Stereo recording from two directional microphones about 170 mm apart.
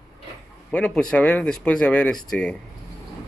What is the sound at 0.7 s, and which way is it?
Speech, 5° left (ahead or behind).